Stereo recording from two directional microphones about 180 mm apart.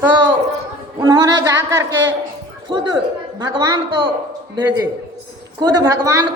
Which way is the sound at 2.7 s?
25° right (ahead or behind).